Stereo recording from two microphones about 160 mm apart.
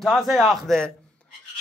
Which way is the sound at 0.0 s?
Centre (ahead or behind).